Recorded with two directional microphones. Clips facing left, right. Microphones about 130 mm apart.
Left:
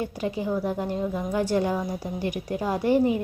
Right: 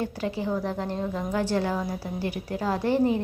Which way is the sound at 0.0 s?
15° left (ahead or behind).